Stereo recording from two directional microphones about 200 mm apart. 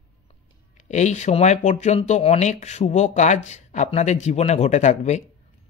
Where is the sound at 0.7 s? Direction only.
35° left (ahead or behind).